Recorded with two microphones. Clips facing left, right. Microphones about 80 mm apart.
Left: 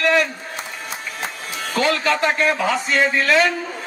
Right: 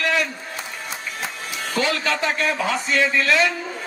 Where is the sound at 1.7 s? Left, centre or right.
Left.